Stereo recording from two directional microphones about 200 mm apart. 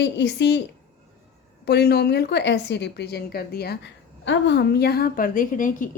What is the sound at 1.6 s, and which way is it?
A woman's voice, 55° left (ahead or behind).